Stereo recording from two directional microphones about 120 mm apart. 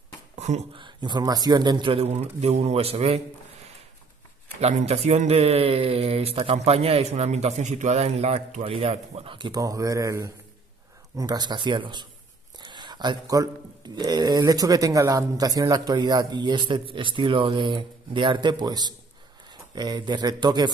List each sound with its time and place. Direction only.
0.7 s speech: 40° right (ahead or behind)
2.0 s a man's voice: 65° right (ahead or behind)
4.6 s a man's voice: 60° right (ahead or behind); by 8.6 s 75° right (ahead or behind)
8.6 s speech: 55° right (ahead or behind)
9.5 s speech: 30° right (ahead or behind)